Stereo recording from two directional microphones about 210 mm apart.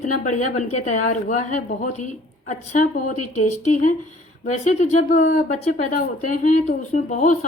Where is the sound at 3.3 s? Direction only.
35° left (ahead or behind).